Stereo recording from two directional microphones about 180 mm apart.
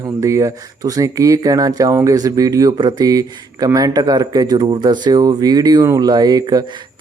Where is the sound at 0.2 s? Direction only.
15° right (ahead or behind).